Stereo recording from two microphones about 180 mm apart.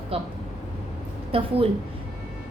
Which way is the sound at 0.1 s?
30° right (ahead or behind).